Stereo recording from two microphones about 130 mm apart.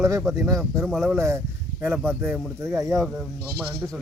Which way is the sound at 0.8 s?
Centre (ahead or behind).